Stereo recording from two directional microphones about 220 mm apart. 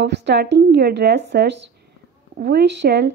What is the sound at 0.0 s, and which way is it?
A woman's voice, 50° right (ahead or behind).